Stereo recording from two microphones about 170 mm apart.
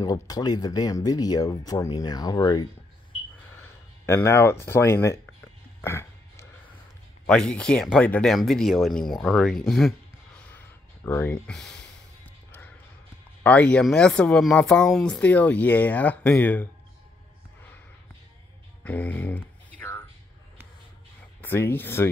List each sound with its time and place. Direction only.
0.0 s speech: 20° left (ahead or behind)
3.5 s a sound: 15° left (ahead or behind)
7.2 s speech: 5° left (ahead or behind)
11.1 s speech: 10° left (ahead or behind)
13.4 s speech: 10° left (ahead or behind)
18.9 s a sound: 10° left (ahead or behind)
21.4 s speech: 15° left (ahead or behind)